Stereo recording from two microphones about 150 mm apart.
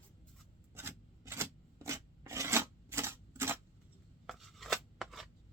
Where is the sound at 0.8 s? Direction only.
15° right (ahead or behind).